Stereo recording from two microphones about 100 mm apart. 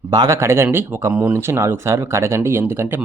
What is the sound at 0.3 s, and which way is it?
Speech, 25° right (ahead or behind).